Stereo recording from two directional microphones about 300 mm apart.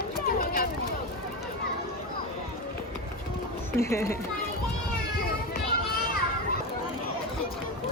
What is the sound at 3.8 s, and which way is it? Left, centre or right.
Speech, centre.